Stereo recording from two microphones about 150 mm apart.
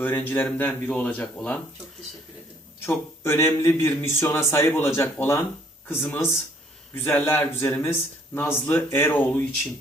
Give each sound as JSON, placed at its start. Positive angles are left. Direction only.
{"t": 0.0, "sound": "speech", "side_deg": 10}
{"t": 2.8, "sound": "speech", "side_deg": 15}